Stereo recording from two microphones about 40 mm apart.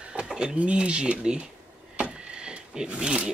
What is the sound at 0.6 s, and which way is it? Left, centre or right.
Speech, right.